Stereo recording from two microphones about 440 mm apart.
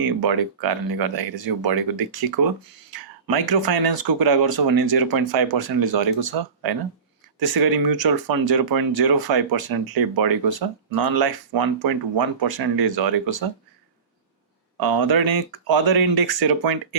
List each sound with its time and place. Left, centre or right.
0.0 s speech: right
14.8 s speech: right